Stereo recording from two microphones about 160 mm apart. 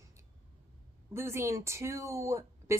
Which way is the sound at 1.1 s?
15° right (ahead or behind).